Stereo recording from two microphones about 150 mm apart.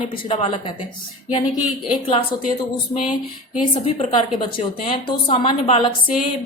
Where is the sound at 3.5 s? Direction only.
35° left (ahead or behind).